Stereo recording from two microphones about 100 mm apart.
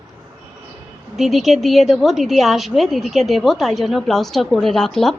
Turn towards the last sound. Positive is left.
turn(degrees=5)  # may be behind; listen again after turning